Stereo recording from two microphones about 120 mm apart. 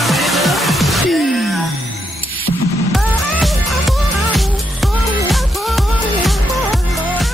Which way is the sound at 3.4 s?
Centre (ahead or behind).